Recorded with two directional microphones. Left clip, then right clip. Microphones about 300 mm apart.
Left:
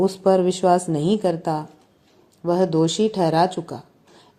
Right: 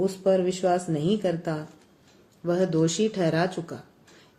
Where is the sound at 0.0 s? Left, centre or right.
Left.